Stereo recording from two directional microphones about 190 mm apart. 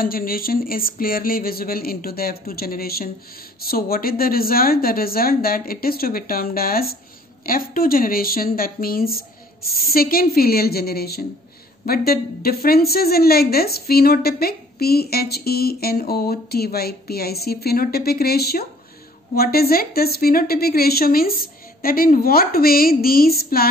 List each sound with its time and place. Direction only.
0.0 s a woman's voice: 50° left (ahead or behind)